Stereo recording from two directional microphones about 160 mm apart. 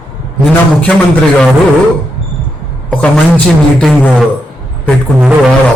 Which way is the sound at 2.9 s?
5° left (ahead or behind).